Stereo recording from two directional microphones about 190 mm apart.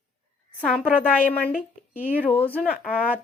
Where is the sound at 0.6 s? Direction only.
5° left (ahead or behind).